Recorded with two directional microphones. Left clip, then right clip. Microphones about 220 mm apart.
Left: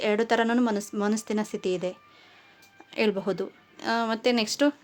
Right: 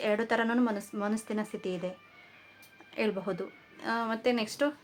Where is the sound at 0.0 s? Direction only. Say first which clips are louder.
Left 5 dB; 45° left (ahead or behind).